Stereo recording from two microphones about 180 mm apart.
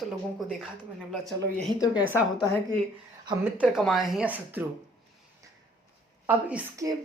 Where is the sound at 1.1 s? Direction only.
Centre (ahead or behind).